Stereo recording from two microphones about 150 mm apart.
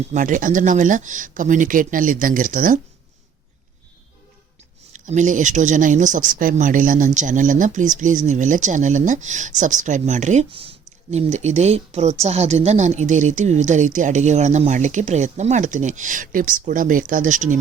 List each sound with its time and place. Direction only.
0.1 s speech: 60° right (ahead or behind)
4.9 s speech: 55° right (ahead or behind)
10.5 s speech: 40° right (ahead or behind); by 17.6 s 55° right (ahead or behind)